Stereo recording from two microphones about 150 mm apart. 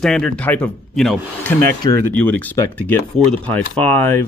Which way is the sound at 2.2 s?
10° left (ahead or behind).